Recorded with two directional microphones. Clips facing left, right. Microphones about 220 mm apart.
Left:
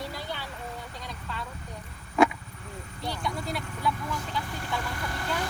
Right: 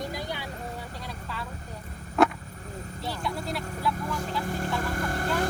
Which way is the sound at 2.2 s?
Centre (ahead or behind).